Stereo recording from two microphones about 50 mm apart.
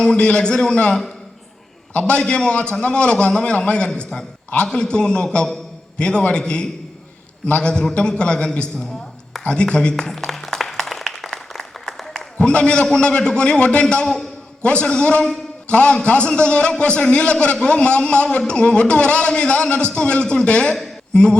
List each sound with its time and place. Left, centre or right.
0.0 s a man's voice: centre
9.9 s a sound: centre
12.4 s speech: left